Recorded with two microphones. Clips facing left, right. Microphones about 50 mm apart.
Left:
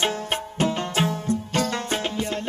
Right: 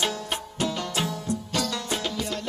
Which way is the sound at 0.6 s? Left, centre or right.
Left.